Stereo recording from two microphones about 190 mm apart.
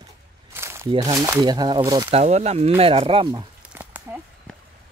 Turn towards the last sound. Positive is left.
turn(degrees=-10)  # may be behind; listen again after turning